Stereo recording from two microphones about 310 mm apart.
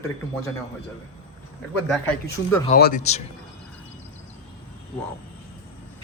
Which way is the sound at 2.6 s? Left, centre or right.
Left.